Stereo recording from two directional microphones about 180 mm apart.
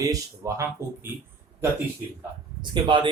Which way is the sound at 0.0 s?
20° right (ahead or behind).